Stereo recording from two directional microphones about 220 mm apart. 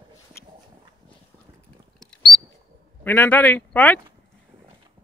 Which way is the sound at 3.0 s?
10° left (ahead or behind).